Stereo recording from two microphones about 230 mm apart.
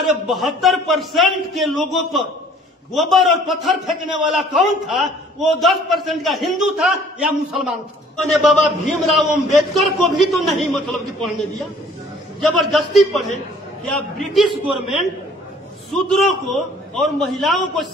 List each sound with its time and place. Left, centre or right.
0.0 s a man's voice: centre